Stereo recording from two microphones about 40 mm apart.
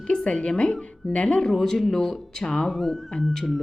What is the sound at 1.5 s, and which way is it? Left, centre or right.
Speech, centre.